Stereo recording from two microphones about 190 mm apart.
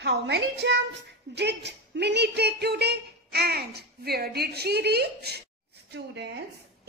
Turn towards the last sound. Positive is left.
turn(degrees=-60)  # may be behind; listen again after turning